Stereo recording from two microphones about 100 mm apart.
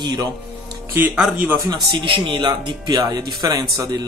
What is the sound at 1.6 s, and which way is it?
Speech, 45° right (ahead or behind).